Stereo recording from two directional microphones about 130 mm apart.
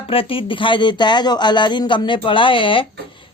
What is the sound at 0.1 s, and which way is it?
A woman's voice, 45° left (ahead or behind).